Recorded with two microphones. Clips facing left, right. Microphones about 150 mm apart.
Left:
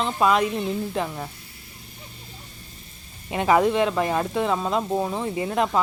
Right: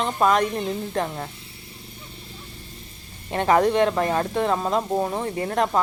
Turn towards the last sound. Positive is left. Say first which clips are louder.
# even
turn(degrees=10)  # may be behind; listen again after turning